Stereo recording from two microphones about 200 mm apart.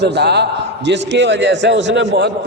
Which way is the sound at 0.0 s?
55° right (ahead or behind).